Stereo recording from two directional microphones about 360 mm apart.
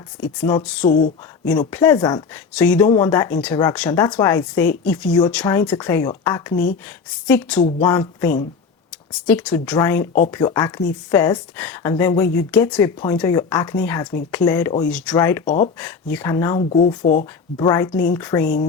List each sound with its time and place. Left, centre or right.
0.4 s speech: centre
0.8 s speech: left
1.5 s speech: centre
6.5 s speech: left
6.8 s a woman's voice: centre
18.4 s speech: left